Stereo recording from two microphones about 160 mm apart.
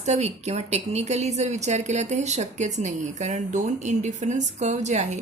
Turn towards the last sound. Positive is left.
turn(degrees=-45)  # may be behind; listen again after turning